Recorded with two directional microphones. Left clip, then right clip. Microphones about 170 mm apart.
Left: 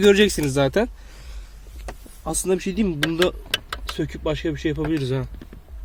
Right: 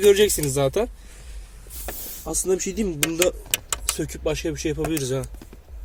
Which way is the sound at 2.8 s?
25° left (ahead or behind).